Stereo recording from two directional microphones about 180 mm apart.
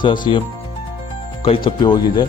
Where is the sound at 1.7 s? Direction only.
25° left (ahead or behind).